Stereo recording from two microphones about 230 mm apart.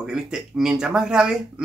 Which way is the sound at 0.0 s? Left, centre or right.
Centre.